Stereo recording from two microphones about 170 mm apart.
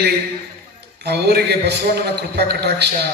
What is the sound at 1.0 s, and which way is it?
A man's voice, 70° right (ahead or behind).